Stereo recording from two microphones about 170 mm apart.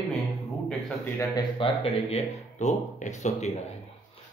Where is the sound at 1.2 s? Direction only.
25° left (ahead or behind); by 3.5 s 40° left (ahead or behind).